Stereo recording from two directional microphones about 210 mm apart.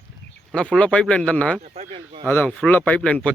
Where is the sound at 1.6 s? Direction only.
30° right (ahead or behind).